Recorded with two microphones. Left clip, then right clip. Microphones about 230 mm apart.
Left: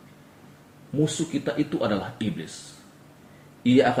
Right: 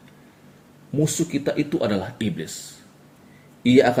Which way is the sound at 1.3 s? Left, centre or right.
Right.